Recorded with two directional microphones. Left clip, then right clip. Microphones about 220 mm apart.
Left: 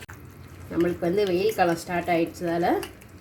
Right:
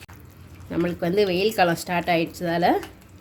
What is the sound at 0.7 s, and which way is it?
Speech, 45° right (ahead or behind).